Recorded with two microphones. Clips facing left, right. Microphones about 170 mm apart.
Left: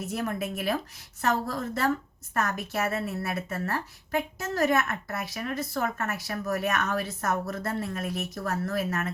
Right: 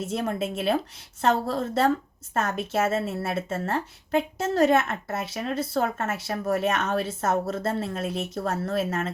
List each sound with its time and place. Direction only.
0.0 s a woman's voice: 25° right (ahead or behind)